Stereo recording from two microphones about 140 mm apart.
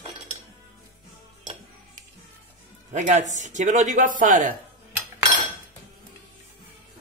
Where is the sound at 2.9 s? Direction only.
60° right (ahead or behind).